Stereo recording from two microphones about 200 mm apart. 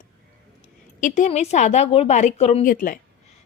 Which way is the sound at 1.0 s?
40° left (ahead or behind).